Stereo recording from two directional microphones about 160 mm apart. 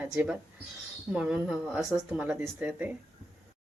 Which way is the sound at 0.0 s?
10° right (ahead or behind).